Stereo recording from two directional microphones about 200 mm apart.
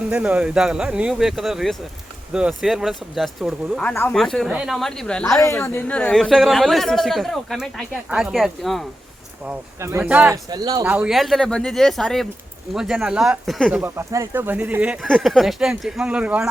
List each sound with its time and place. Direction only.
0.1 s speech: 5° right (ahead or behind)
9.5 s speech: 10° right (ahead or behind)
10.5 s speech: 20° right (ahead or behind)
10.8 s speech: 5° right (ahead or behind)
13.9 s speech: 15° right (ahead or behind)